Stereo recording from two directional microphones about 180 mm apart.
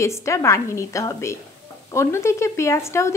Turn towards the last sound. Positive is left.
turn(degrees=15)  # may be behind; listen again after turning